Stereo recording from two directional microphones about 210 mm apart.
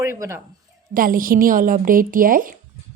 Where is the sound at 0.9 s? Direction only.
40° right (ahead or behind).